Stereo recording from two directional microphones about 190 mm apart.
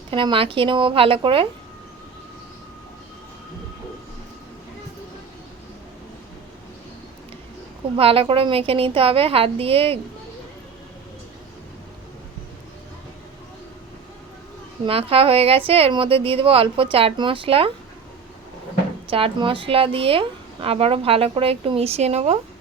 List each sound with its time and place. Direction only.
0.1 s a woman's voice: 25° right (ahead or behind)
7.9 s a woman's voice: 30° right (ahead or behind)
14.8 s a woman's voice: 30° right (ahead or behind)
19.1 s a woman's voice: 30° right (ahead or behind)